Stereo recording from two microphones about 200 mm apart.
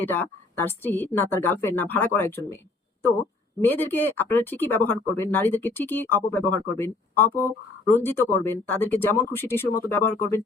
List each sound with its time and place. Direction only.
0.0 s speech: 10° left (ahead or behind)
3.6 s speech: 10° left (ahead or behind)